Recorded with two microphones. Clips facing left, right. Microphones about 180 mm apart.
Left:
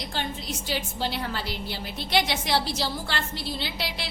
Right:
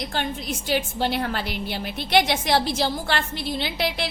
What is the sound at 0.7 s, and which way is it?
A woman's voice, 60° right (ahead or behind).